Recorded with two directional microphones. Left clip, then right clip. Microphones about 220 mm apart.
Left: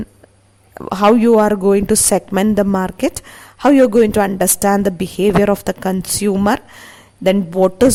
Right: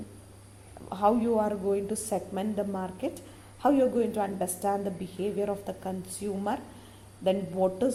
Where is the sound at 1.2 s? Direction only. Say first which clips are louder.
Left 16 dB; 45° left (ahead or behind).